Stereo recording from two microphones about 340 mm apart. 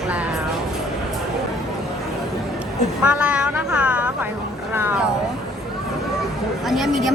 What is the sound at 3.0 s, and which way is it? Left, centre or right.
Speech, centre.